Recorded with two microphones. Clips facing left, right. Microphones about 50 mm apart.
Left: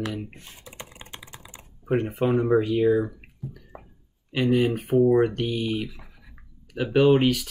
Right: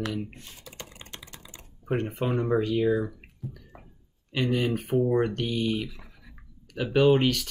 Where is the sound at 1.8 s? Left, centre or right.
Centre.